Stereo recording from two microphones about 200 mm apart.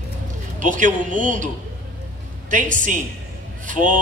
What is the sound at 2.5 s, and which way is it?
A man's voice, 40° right (ahead or behind).